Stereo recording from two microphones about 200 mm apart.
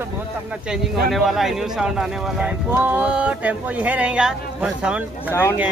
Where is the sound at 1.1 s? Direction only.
Centre (ahead or behind).